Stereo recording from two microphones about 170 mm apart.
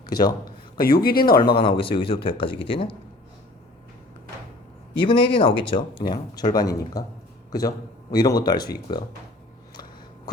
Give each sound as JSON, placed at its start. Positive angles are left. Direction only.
{"t": 0.0, "sound": "speech", "side_deg": 25}
{"t": 0.8, "sound": "speech", "side_deg": 60}
{"t": 1.5, "sound": "speech", "side_deg": 30}
{"t": 4.9, "sound": "speech", "side_deg": 30}
{"t": 8.1, "sound": "speech", "side_deg": 25}